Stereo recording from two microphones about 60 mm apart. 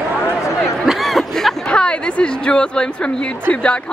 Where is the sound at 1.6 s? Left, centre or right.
Centre.